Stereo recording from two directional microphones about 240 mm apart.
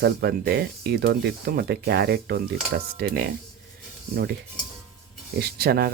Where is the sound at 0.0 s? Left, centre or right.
Right.